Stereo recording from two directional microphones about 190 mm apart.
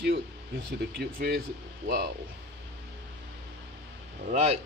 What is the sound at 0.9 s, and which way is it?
Speech, 55° right (ahead or behind).